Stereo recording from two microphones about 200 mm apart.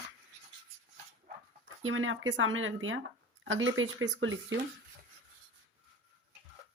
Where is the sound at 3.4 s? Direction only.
70° right (ahead or behind).